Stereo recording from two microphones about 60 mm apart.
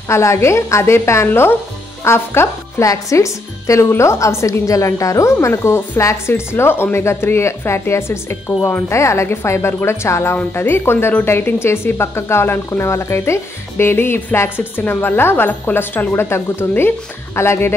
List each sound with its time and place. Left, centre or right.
0.1 s speech: left
2.8 s speech: left
8.6 s a woman's voice: left
8.9 s speech: left
14.6 s a woman's voice: left